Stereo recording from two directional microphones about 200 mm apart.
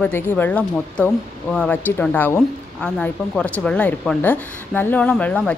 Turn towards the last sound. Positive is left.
turn(degrees=5)  # may be behind; listen again after turning